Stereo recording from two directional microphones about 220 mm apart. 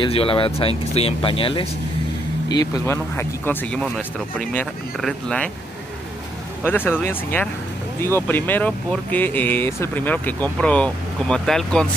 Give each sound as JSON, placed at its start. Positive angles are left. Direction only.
{"t": 0.0, "sound": "speech", "side_deg": 25}
{"t": 6.6, "sound": "speech", "side_deg": 10}